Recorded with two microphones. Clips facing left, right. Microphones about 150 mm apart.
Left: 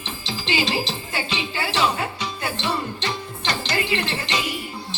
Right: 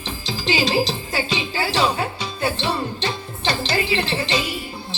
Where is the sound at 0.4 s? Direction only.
40° right (ahead or behind).